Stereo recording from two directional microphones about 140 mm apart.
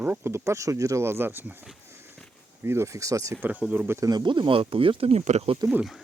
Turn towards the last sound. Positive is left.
turn(degrees=-5)  # may be behind; listen again after turning